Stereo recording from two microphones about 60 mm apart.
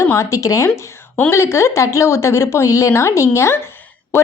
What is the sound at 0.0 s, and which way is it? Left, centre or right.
Speech, left.